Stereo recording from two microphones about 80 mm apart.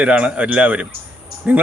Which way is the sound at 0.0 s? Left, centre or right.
Centre.